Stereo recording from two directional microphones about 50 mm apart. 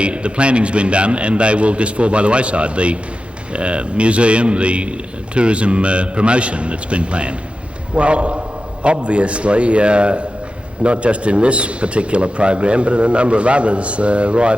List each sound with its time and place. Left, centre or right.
0.0 s a man's voice: right